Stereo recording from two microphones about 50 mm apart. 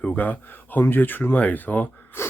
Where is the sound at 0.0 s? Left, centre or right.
Left.